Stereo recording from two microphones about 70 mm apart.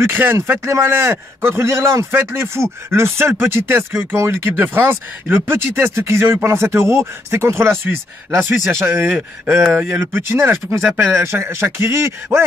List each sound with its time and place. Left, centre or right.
0.0 s a man's voice: right